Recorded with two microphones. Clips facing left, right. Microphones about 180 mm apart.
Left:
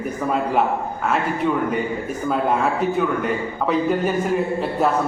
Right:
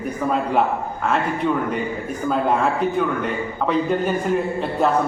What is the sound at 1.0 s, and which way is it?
Speech, 5° left (ahead or behind).